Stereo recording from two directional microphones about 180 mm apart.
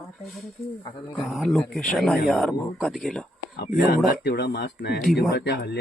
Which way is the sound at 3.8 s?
60° left (ahead or behind).